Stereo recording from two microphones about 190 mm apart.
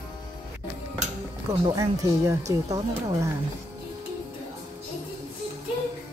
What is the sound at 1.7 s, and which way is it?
Speech, 15° right (ahead or behind).